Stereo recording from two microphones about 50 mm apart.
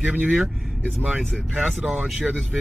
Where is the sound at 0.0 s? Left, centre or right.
Centre.